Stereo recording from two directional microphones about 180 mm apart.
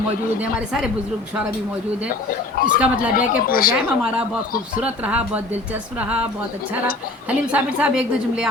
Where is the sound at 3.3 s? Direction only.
55° left (ahead or behind).